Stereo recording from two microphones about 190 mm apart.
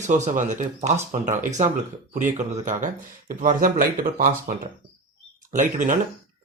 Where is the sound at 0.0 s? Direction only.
40° right (ahead or behind).